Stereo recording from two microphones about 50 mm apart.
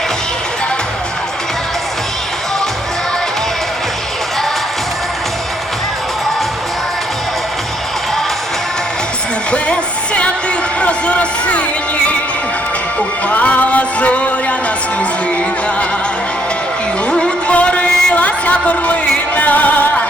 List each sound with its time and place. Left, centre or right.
10.8 s a sound: left
13.2 s music: left
17.1 s music: centre